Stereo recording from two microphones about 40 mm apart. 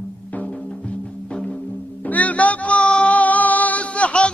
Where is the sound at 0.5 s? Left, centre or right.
Left.